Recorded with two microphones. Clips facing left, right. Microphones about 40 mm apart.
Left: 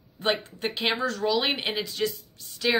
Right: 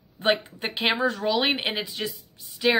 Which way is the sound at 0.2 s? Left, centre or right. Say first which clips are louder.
Right 3 dB; right.